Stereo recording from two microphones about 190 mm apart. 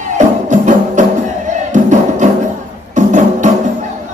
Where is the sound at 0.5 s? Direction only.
40° right (ahead or behind).